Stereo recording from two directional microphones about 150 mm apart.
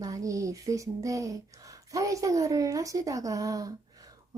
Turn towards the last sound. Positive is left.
turn(degrees=-20)  # may be behind; listen again after turning